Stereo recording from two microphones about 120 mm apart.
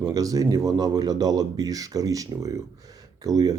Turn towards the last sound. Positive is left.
turn(degrees=-30)  # may be behind; listen again after turning